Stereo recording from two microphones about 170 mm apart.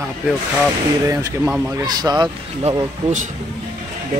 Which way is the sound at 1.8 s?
25° right (ahead or behind).